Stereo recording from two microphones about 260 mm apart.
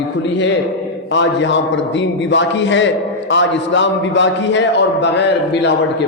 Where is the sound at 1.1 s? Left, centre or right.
Left.